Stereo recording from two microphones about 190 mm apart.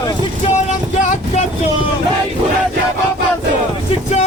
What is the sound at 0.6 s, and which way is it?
Vehicle, 35° left (ahead or behind).